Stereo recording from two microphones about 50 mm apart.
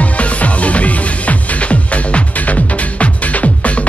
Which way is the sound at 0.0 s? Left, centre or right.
Left.